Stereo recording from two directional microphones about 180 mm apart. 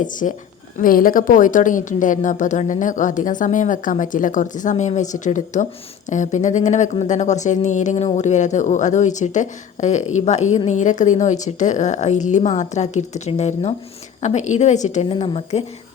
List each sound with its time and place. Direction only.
0.0 s a woman's voice: 45° left (ahead or behind)